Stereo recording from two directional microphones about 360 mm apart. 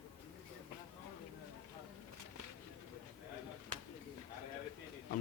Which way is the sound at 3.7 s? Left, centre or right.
Right.